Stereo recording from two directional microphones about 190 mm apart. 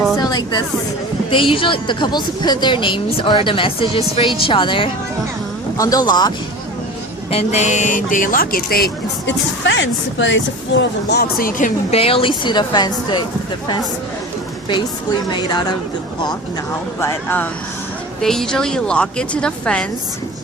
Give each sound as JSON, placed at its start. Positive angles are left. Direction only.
{"t": 0.2, "sound": "a sound", "side_deg": 20}
{"t": 1.3, "sound": "a woman's voice", "side_deg": 25}
{"t": 7.3, "sound": "a woman's voice", "side_deg": 35}
{"t": 15.3, "sound": "a woman's voice", "side_deg": 25}
{"t": 17.0, "sound": "a woman's voice", "side_deg": 10}